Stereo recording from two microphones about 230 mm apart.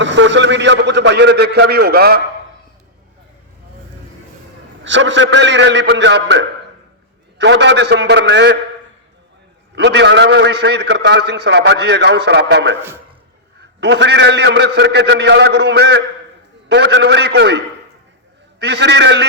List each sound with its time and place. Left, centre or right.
0.0 s a man's voice: right
4.8 s a man's voice: right
9.7 s a man's voice: right
13.8 s a man's voice: right
18.6 s a man's voice: right